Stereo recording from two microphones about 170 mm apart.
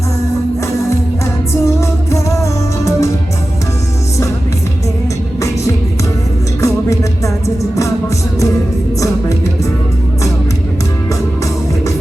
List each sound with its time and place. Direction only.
1.6 s music: 15° left (ahead or behind)
6.6 s music: 20° left (ahead or behind)